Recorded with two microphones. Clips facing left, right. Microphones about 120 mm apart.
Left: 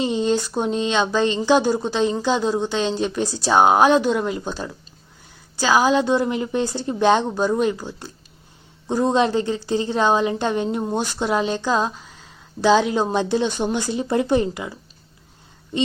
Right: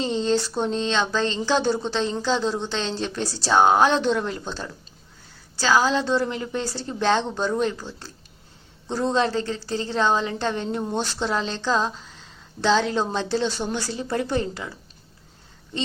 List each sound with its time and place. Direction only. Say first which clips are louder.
0.0 s a woman's voice: left 2 dB; 15° left (ahead or behind)